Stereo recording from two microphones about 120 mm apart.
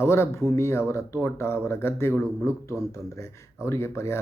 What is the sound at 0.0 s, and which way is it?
Speech, 20° left (ahead or behind).